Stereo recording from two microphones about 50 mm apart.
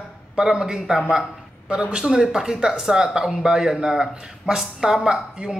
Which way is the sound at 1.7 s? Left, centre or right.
Centre.